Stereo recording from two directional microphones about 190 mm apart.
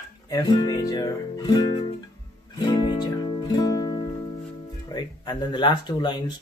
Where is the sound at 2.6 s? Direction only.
20° left (ahead or behind).